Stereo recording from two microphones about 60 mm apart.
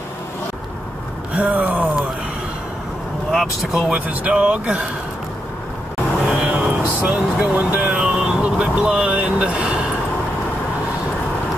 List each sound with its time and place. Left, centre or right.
1.3 s gasp: right
3.3 s speech: centre
4.3 s speech: centre
6.2 s vehicle: centre